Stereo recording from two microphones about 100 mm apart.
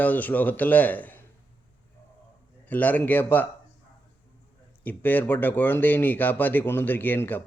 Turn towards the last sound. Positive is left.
turn(degrees=20)  # may be behind; listen again after turning